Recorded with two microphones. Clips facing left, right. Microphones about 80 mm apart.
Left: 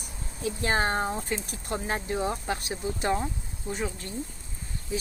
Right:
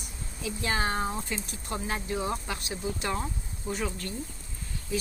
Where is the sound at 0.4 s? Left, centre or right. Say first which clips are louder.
Left 3 dB; left.